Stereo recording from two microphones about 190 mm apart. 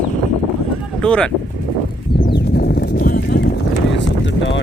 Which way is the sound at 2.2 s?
55° left (ahead or behind).